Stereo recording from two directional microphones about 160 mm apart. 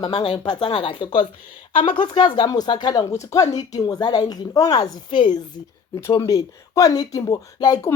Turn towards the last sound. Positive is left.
turn(degrees=25)  # may be behind; listen again after turning